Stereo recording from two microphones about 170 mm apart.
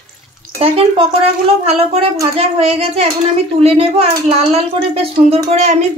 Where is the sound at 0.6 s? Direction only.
35° right (ahead or behind).